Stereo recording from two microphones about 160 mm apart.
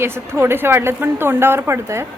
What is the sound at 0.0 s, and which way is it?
Speech, 15° right (ahead or behind).